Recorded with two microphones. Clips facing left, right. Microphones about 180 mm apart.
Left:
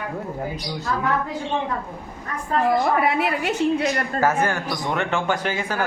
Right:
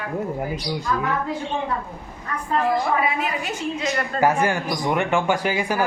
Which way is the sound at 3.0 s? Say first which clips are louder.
Left 3 dB; 65° left (ahead or behind).